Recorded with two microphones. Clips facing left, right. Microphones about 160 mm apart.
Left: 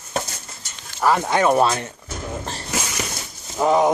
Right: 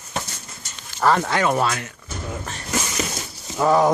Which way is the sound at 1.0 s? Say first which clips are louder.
Left 1 dB; 10° left (ahead or behind).